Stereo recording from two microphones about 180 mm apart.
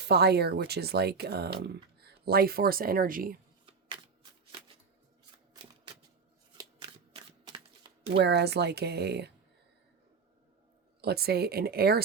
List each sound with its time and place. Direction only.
0.0 s speech: 65° right (ahead or behind)
6.6 s shuffling cards: 25° right (ahead or behind)
8.1 s speech: 70° right (ahead or behind)
11.0 s speech: 60° right (ahead or behind)